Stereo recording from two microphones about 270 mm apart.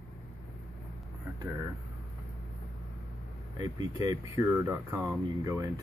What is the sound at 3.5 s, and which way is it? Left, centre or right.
Speech, centre.